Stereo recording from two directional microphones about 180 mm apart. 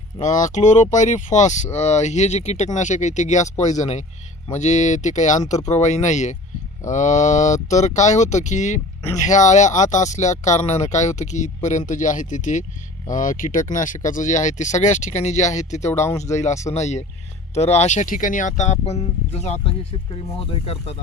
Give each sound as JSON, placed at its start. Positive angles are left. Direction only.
{"t": 0.2, "sound": "speech", "side_deg": 45}
{"t": 15.8, "sound": "speech", "side_deg": 15}
{"t": 16.4, "sound": "speech", "side_deg": 40}